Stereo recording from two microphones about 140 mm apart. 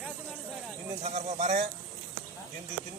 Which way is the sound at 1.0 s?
55° right (ahead or behind).